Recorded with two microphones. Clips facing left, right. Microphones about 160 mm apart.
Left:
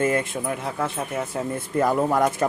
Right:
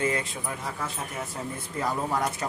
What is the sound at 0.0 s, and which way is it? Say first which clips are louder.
Speech: left 6 dB; 50° left (ahead or behind).